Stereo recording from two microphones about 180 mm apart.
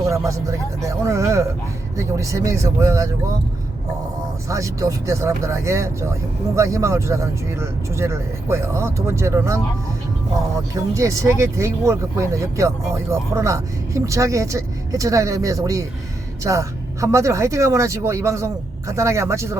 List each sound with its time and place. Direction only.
0.3 s speech: 15° right (ahead or behind)
4.4 s speech: 15° right (ahead or behind)